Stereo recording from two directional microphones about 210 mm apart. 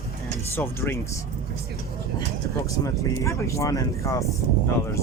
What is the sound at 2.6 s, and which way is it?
Speech, 15° left (ahead or behind).